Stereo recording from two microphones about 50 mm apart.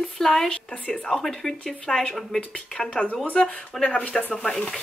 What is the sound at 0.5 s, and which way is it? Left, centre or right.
Speech, left.